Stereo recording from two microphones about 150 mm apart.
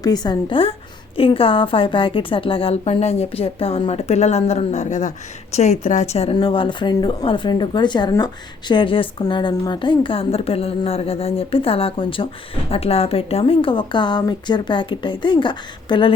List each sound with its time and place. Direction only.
0.0 s a woman's voice: 25° left (ahead or behind); by 6.3 s 45° left (ahead or behind)
6.3 s a woman's voice: 35° left (ahead or behind)